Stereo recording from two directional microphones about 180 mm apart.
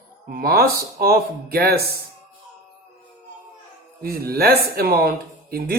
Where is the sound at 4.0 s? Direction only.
55° right (ahead or behind).